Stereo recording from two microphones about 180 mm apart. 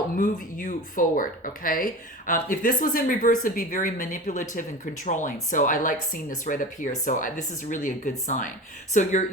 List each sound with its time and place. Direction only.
0.2 s speech: 50° left (ahead or behind)